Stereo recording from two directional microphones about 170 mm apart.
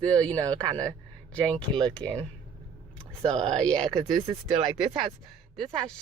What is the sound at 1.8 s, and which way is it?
Speech, 5° left (ahead or behind).